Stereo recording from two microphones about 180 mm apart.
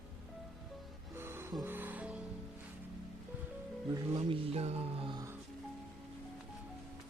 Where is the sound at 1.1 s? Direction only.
10° right (ahead or behind).